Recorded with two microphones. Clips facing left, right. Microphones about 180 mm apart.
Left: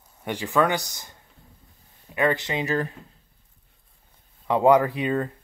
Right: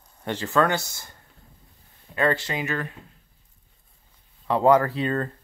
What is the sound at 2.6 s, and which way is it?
Speech, 35° left (ahead or behind).